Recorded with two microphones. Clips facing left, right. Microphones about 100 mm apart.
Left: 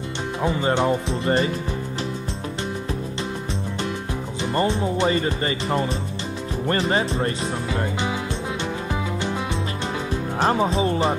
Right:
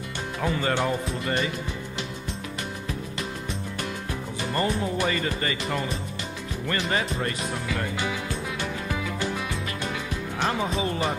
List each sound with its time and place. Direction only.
0.4 s speech: 25° left (ahead or behind)
4.4 s speech: 25° left (ahead or behind)
9.2 s music: 25° left (ahead or behind)
10.4 s speech: 35° left (ahead or behind)